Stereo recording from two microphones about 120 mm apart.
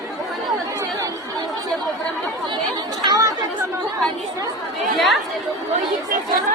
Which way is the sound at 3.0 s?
30° right (ahead or behind).